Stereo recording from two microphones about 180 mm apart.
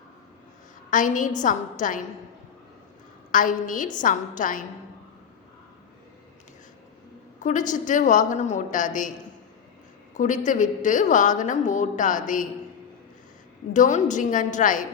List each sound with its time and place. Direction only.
0.9 s a woman's voice: 45° left (ahead or behind)
3.3 s a woman's voice: 45° left (ahead or behind)
7.4 s a woman's voice: 45° left (ahead or behind)
10.2 s a woman's voice: 45° left (ahead or behind)
13.7 s a woman's voice: 45° left (ahead or behind)